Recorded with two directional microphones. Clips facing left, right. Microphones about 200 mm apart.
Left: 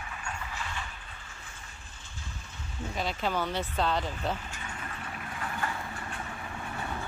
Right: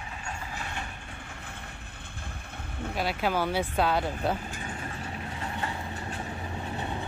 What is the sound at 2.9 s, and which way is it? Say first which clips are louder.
Speech: right 3 dB; 10° right (ahead or behind).